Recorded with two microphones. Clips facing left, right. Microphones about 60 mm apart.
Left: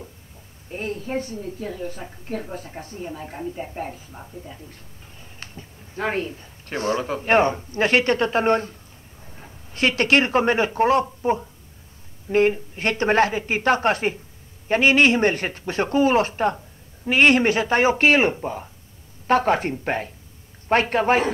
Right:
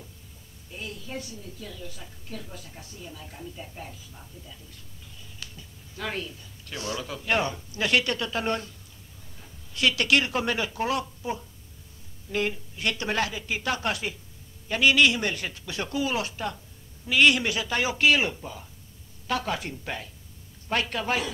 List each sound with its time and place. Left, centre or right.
0.7 s a woman's voice: left